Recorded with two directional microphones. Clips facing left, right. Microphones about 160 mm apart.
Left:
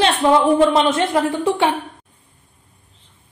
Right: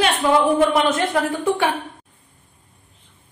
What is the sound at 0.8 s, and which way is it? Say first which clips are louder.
Speech: left 2 dB; 20° left (ahead or behind).